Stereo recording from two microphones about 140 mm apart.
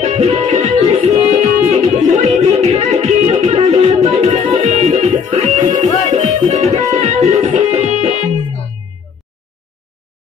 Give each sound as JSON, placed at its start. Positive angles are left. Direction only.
{"t": 0.0, "sound": "music", "side_deg": -45}